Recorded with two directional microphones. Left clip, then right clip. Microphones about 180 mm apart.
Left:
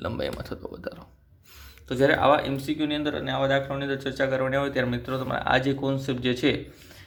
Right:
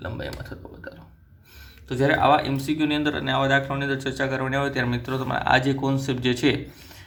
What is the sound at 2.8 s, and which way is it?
Speech, centre (ahead or behind).